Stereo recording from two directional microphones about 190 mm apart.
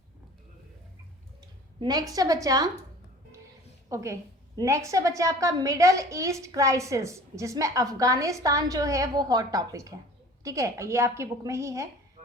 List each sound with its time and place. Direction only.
1.8 s a woman's voice: 20° right (ahead or behind)
3.8 s a woman's voice: 15° right (ahead or behind)